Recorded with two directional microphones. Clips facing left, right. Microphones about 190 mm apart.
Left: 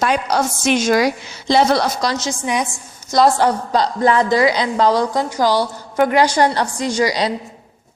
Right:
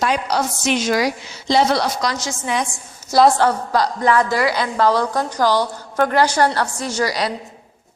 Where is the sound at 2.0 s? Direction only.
25° left (ahead or behind).